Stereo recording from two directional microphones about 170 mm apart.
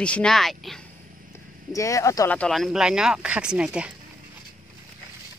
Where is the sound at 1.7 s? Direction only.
20° left (ahead or behind).